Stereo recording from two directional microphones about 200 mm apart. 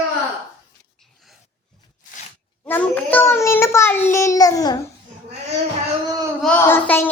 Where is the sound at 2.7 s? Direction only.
10° left (ahead or behind).